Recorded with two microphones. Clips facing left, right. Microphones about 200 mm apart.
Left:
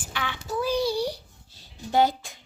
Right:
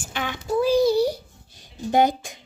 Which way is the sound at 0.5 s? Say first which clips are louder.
Right 7 dB; 25° right (ahead or behind).